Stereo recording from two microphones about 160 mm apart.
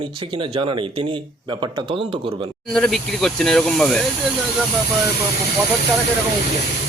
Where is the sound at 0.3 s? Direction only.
30° right (ahead or behind).